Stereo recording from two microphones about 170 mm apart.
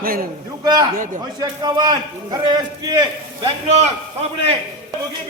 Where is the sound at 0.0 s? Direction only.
60° right (ahead or behind).